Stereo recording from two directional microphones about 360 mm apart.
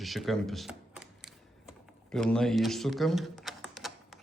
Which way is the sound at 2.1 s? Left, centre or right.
Centre.